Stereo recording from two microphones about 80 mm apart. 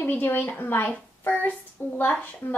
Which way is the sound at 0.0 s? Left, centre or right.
Left.